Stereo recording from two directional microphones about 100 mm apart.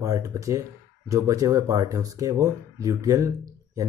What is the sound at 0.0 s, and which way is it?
Speech, 35° right (ahead or behind).